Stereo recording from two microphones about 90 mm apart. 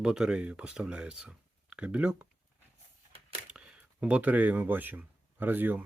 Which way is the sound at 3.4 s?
10° right (ahead or behind).